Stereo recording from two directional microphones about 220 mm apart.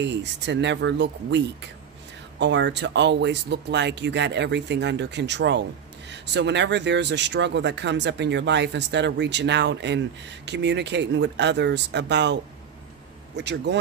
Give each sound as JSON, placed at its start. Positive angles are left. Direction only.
{"t": 0.0, "sound": "speech", "side_deg": -55}
{"t": 13.4, "sound": "speech", "side_deg": -50}